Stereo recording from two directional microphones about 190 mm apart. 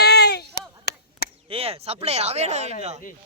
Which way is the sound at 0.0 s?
60° left (ahead or behind).